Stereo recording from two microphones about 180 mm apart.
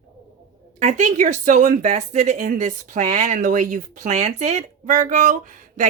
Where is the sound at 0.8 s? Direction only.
40° right (ahead or behind).